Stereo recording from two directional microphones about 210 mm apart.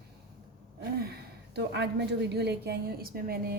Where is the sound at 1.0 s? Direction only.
50° right (ahead or behind).